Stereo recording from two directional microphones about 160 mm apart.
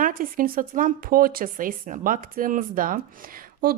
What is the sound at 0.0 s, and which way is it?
A woman's voice, 60° right (ahead or behind).